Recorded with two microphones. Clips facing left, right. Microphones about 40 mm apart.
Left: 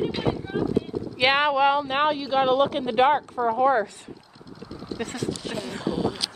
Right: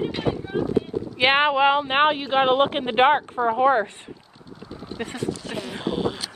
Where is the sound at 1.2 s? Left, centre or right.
Right.